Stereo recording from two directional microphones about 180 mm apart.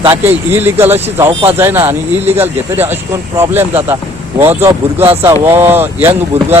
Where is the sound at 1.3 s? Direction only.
30° right (ahead or behind).